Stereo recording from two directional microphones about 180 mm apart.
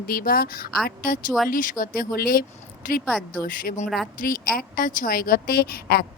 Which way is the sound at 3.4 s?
50° left (ahead or behind).